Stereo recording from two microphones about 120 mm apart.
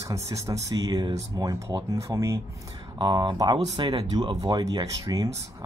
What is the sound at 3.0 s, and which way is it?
Speech, 40° right (ahead or behind).